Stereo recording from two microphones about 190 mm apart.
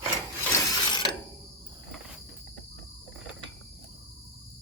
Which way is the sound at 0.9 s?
25° left (ahead or behind).